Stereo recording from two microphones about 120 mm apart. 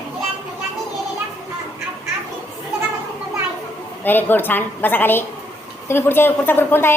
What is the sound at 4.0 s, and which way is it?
A woman's voice, 15° left (ahead or behind).